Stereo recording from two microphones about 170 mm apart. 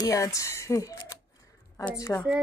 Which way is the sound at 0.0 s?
20° left (ahead or behind).